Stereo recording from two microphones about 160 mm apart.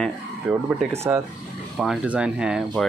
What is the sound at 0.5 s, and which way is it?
Speech, 5° right (ahead or behind).